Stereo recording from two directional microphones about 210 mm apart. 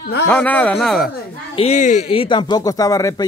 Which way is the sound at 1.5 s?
30° left (ahead or behind).